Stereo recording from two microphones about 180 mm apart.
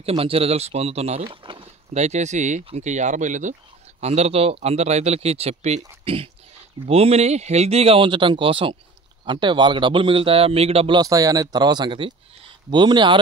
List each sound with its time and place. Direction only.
0.0 s speech: 35° right (ahead or behind)
11.0 s speech: 20° right (ahead or behind)